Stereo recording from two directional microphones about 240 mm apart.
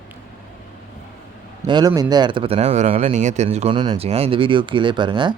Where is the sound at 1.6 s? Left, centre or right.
Centre.